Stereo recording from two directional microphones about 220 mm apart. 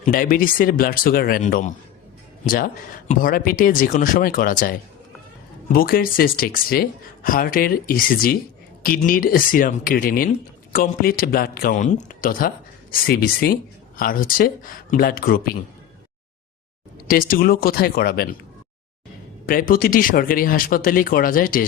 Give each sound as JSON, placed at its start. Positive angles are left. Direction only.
{"t": 0.0, "sound": "a man's voice", "side_deg": 40}
{"t": 17.1, "sound": "speech", "side_deg": 40}
{"t": 19.5, "sound": "speech", "side_deg": 40}